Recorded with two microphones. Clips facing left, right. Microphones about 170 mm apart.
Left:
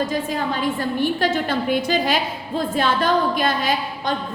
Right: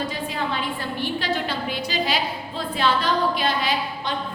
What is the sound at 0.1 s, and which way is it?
A woman's voice, 45° left (ahead or behind).